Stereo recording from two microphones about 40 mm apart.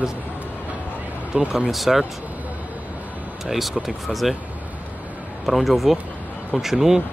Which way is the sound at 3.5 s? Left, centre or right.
Centre.